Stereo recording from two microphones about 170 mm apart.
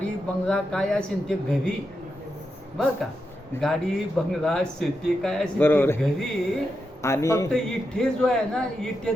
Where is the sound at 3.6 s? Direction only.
Centre (ahead or behind); by 7.4 s 15° left (ahead or behind).